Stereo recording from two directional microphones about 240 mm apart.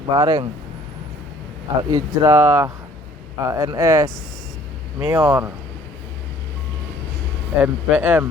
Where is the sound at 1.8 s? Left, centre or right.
Centre.